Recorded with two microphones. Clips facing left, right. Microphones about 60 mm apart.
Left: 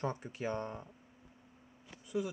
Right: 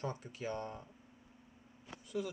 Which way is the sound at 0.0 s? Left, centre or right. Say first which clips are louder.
Left 4 dB; left.